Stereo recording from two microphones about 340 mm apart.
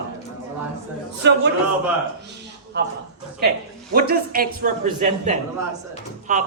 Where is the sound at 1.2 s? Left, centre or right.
Right.